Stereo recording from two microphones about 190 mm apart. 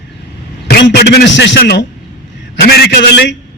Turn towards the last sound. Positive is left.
turn(degrees=65)  # may be behind; listen again after turning